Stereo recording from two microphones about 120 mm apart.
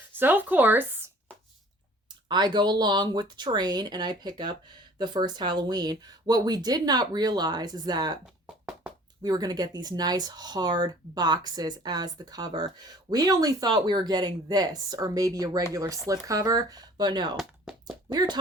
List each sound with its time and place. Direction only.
0.1 s speech: 15° right (ahead or behind)
2.2 s speech: 40° right (ahead or behind)
9.2 s speech: 30° right (ahead or behind)
17.3 s a sound: 5° right (ahead or behind)
18.1 s speech: 35° right (ahead or behind)